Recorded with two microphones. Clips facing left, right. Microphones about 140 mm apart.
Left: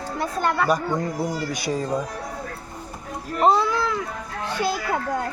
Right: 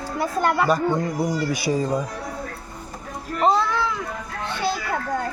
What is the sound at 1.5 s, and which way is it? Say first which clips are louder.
Speech: right 3 dB; 5° right (ahead or behind).